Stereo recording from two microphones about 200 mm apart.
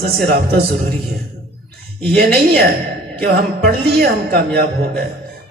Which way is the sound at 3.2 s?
50° right (ahead or behind).